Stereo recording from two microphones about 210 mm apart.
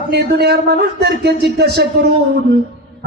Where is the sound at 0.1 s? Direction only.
50° right (ahead or behind).